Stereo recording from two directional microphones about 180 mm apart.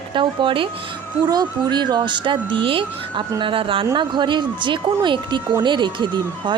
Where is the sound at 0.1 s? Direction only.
25° right (ahead or behind).